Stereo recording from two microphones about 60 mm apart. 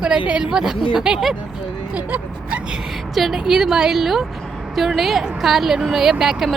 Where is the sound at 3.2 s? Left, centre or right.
Centre.